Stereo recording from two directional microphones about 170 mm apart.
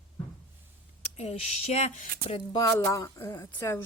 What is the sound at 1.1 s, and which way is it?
Speech, 40° left (ahead or behind).